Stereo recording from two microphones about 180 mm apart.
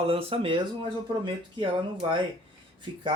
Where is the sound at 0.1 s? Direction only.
30° right (ahead or behind).